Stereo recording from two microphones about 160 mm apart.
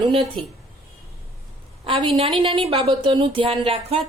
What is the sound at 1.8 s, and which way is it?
A woman's voice, 35° right (ahead or behind).